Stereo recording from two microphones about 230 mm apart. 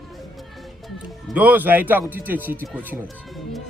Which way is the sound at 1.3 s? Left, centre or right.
Centre.